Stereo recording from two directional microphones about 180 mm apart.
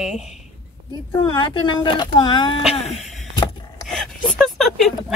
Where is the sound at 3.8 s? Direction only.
Centre (ahead or behind).